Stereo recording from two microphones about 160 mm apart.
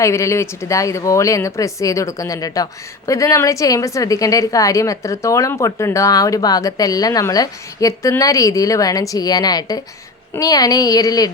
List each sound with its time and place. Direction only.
0.0 s a woman's voice: 20° left (ahead or behind)